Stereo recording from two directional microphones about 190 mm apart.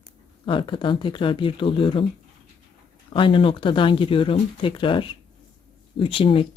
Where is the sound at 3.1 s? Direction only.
25° left (ahead or behind).